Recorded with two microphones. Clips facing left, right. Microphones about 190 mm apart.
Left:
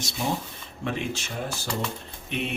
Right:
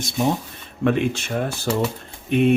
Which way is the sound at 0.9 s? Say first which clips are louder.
Right 10 dB; 60° right (ahead or behind).